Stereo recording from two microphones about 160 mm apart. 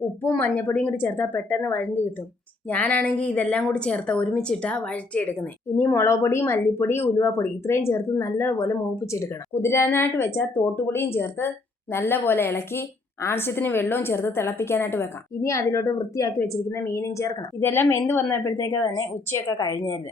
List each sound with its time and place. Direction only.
0.2 s a woman's voice: 10° left (ahead or behind)